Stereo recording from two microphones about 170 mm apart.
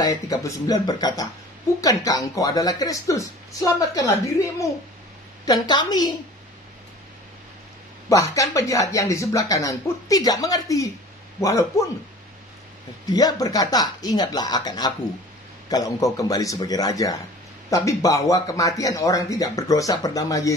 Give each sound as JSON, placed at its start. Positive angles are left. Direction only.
{"t": 0.0, "sound": "speech", "side_deg": 20}
{"t": 8.1, "sound": "speech", "side_deg": 20}
{"t": 13.0, "sound": "speech", "side_deg": 20}